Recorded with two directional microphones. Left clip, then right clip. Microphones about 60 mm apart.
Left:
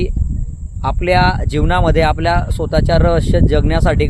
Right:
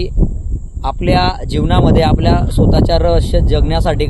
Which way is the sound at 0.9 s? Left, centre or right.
Left.